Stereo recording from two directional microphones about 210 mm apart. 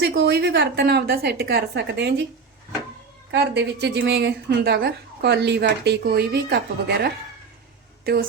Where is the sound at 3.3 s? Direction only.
55° right (ahead or behind).